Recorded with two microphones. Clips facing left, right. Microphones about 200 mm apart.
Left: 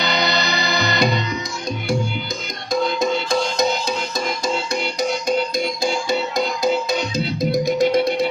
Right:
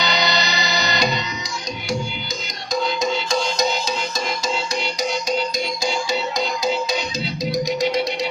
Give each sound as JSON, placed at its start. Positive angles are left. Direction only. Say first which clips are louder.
{"t": 0.0, "sound": "music", "louder": "left 1 dB", "side_deg": 55}
{"t": 3.0, "sound": "music", "louder": "left 2 dB", "side_deg": 55}
{"t": 5.8, "sound": "music", "louder": "left 1 dB", "side_deg": 55}